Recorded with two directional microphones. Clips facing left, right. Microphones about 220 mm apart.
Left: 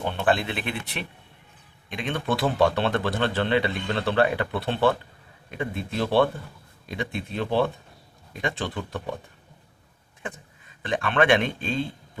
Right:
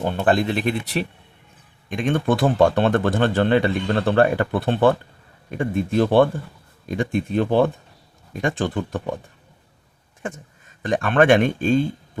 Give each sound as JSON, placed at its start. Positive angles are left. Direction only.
{"t": 0.0, "sound": "speech", "side_deg": -45}
{"t": 1.9, "sound": "speech", "side_deg": -45}
{"t": 10.8, "sound": "speech", "side_deg": -45}